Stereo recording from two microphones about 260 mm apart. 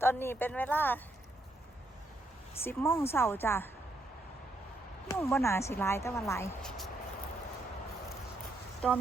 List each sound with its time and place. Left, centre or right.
0.0 s speech: centre
2.6 s speech: centre
5.2 s speech: centre
8.8 s speech: centre